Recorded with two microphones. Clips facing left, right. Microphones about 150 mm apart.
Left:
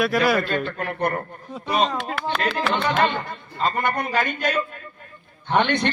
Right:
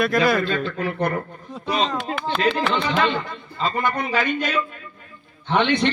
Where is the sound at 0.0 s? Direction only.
5° left (ahead or behind).